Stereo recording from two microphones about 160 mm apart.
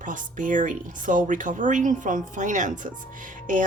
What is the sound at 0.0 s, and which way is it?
Speech, 55° right (ahead or behind).